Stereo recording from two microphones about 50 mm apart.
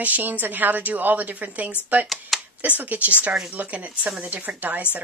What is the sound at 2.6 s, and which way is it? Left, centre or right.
Speech, right.